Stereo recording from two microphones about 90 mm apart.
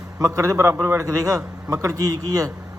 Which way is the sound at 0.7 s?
30° right (ahead or behind).